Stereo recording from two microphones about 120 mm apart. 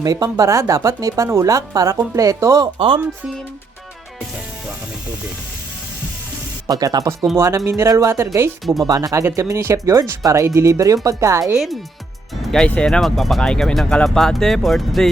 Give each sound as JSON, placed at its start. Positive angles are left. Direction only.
{"t": 0.0, "sound": "speech", "side_deg": -30}
{"t": 2.7, "sound": "speech", "side_deg": -45}
{"t": 6.7, "sound": "speech", "side_deg": -30}
{"t": 11.5, "sound": "speech", "side_deg": 0}